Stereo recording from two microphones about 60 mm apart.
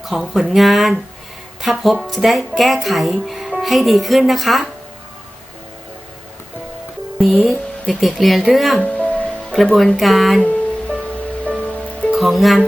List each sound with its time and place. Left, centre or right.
0.0 s speech: centre
7.2 s speech: centre
8.8 s music: centre
9.7 s speech: centre
10.4 s music: centre
12.1 s speech: centre